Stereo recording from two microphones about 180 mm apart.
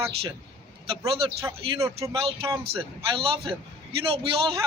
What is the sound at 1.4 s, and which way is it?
Speech, 15° right (ahead or behind).